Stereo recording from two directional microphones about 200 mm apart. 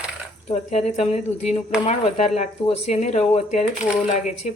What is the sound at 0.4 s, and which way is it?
Speech, 35° left (ahead or behind).